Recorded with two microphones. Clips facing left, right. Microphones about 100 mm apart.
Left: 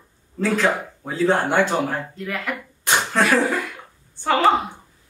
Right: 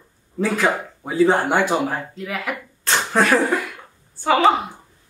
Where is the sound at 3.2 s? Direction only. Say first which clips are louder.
Right 2 dB; centre (ahead or behind).